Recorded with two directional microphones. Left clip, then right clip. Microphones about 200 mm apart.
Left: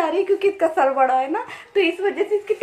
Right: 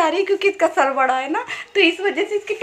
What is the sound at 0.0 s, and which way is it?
A child's voice, 10° right (ahead or behind).